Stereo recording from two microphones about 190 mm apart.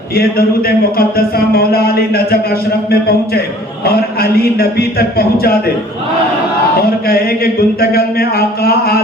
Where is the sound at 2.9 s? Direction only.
55° left (ahead or behind).